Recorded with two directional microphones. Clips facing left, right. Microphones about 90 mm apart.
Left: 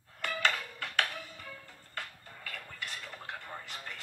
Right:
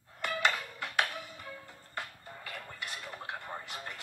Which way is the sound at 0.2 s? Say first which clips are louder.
Right 1 dB; 10° right (ahead or behind).